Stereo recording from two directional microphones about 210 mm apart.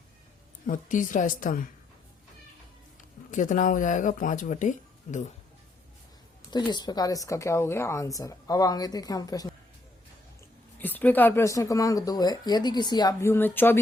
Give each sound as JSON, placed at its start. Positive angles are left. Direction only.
{"t": 0.7, "sound": "speech", "side_deg": 40}
{"t": 3.3, "sound": "speech", "side_deg": 40}
{"t": 6.5, "sound": "speech", "side_deg": 20}
{"t": 10.8, "sound": "speech", "side_deg": 10}